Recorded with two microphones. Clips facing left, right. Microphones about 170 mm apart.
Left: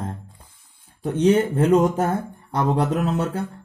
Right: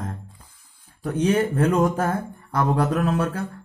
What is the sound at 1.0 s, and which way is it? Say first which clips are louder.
Speech: left 3 dB; 25° left (ahead or behind).